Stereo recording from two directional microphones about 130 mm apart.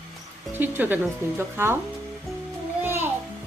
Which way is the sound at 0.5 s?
15° right (ahead or behind).